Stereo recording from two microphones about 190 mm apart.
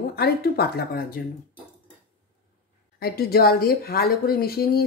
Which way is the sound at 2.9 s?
55° left (ahead or behind).